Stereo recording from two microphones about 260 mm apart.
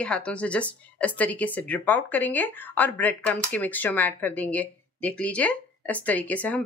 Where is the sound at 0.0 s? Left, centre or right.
Centre.